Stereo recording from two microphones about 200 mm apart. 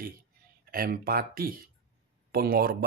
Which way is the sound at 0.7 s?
45° right (ahead or behind).